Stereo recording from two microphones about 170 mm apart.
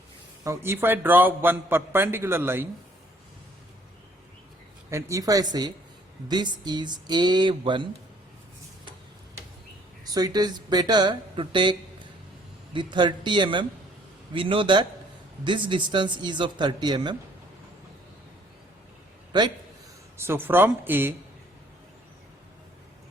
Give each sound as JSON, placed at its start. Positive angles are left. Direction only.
{"t": 0.4, "sound": "a man's voice", "side_deg": -15}
{"t": 4.9, "sound": "speech", "side_deg": -15}
{"t": 10.2, "sound": "speech", "side_deg": -25}
{"t": 19.3, "sound": "speech", "side_deg": -25}
{"t": 20.1, "sound": "a man's voice", "side_deg": -15}